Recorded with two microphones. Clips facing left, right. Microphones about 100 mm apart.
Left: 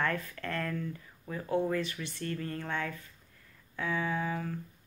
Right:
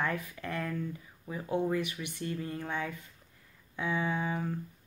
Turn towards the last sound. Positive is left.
turn(degrees=-20)  # may be behind; listen again after turning